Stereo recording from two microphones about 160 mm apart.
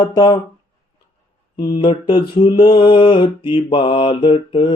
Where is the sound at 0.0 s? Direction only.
25° left (ahead or behind).